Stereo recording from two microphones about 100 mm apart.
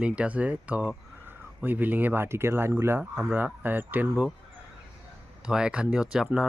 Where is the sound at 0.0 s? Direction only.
10° right (ahead or behind).